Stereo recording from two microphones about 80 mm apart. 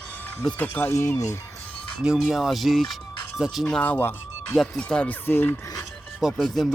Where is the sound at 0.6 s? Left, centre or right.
Left.